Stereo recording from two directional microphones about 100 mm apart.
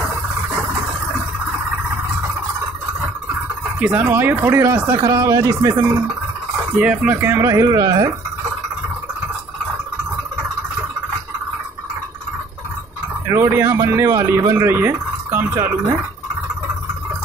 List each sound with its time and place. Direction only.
3.8 s speech: 15° right (ahead or behind)
7.1 s speech: 20° right (ahead or behind)
13.3 s speech: 25° right (ahead or behind)